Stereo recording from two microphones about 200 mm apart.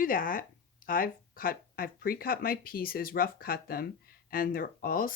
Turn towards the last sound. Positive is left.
turn(degrees=45)  # may be behind; listen again after turning